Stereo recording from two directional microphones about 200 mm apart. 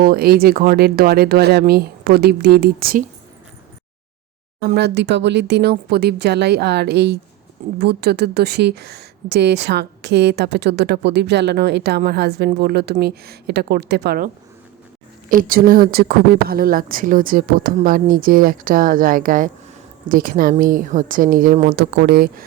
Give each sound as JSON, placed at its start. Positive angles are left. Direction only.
{"t": 0.0, "sound": "speech", "side_deg": -50}
{"t": 4.6, "sound": "a woman's voice", "side_deg": -50}
{"t": 15.3, "sound": "speech", "side_deg": -45}
{"t": 21.8, "sound": "speech", "side_deg": -55}